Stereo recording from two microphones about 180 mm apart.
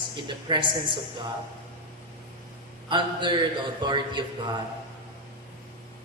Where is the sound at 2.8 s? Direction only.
25° right (ahead or behind).